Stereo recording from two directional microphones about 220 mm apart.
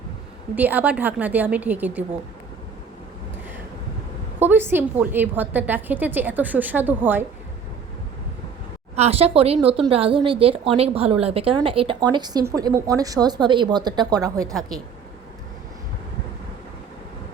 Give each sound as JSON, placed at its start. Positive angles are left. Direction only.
{"t": 0.5, "sound": "a woman's voice", "side_deg": -5}
{"t": 4.4, "sound": "a woman's voice", "side_deg": -10}
{"t": 9.0, "sound": "a woman's voice", "side_deg": -25}